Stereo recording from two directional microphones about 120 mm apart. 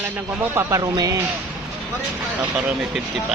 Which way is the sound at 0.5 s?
30° right (ahead or behind).